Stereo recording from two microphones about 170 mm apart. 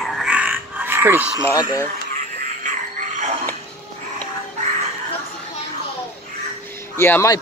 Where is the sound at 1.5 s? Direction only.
20° left (ahead or behind).